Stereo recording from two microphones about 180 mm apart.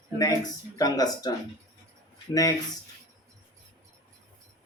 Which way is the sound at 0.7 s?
20° left (ahead or behind).